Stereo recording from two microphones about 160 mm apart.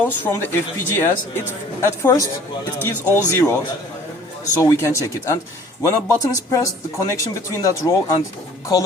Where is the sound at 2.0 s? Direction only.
20° left (ahead or behind).